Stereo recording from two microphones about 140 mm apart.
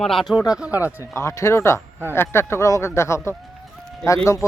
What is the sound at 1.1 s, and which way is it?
Speech, 20° left (ahead or behind).